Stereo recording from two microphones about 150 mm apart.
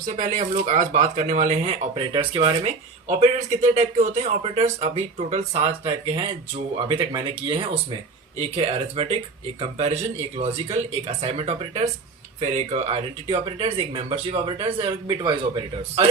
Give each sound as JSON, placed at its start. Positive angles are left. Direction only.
{"t": 0.0, "sound": "speech", "side_deg": -55}
{"t": 2.0, "sound": "speech", "side_deg": -35}
{"t": 3.1, "sound": "speech", "side_deg": -50}
{"t": 8.4, "sound": "speech", "side_deg": -40}
{"t": 13.2, "sound": "speech", "side_deg": -35}